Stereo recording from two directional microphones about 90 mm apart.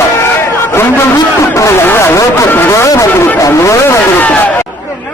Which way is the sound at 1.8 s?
25° left (ahead or behind).